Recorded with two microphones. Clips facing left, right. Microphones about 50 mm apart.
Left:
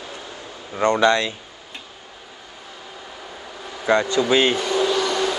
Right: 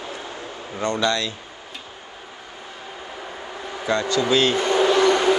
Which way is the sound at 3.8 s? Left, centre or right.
Left.